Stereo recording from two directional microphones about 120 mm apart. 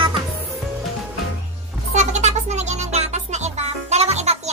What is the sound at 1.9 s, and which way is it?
Music, 70° right (ahead or behind).